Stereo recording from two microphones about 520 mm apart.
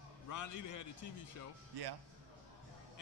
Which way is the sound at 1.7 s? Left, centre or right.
Right.